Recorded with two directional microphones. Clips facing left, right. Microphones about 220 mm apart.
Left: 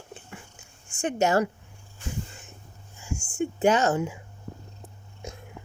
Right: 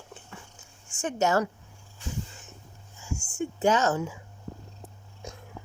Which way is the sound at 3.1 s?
60° left (ahead or behind).